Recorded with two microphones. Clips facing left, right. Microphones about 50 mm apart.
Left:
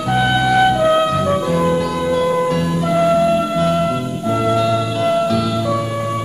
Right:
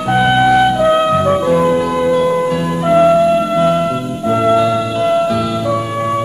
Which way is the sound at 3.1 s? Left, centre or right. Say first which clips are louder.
Right 3 dB; centre.